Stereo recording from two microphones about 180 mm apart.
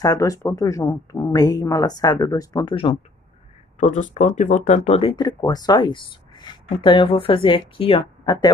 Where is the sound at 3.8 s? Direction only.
45° left (ahead or behind); by 8.5 s 25° left (ahead or behind).